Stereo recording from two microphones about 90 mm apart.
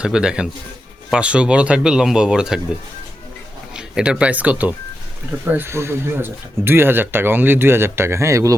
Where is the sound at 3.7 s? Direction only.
10° right (ahead or behind).